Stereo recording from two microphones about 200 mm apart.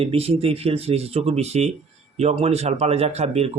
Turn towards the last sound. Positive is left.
turn(degrees=-30)  # may be behind; listen again after turning